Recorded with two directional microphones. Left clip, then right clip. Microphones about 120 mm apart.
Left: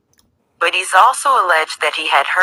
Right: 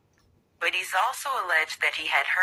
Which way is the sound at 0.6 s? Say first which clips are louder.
Left 13 dB; 40° left (ahead or behind).